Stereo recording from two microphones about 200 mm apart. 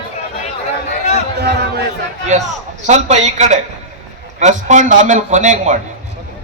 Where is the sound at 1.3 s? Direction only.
55° right (ahead or behind).